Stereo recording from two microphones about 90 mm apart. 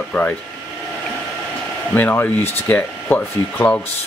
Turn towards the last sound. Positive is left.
turn(degrees=15)  # may be behind; listen again after turning